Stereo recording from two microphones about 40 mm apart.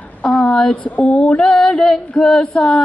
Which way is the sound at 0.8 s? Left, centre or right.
Left.